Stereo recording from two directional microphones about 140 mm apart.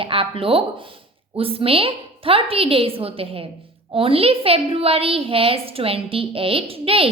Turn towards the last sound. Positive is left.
turn(degrees=-40)  # may be behind; listen again after turning